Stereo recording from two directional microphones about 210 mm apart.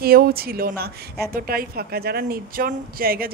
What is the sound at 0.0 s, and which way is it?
A woman's voice, 45° right (ahead or behind).